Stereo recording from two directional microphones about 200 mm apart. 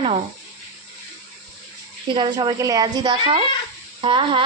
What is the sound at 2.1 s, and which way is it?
A woman's voice, 20° right (ahead or behind).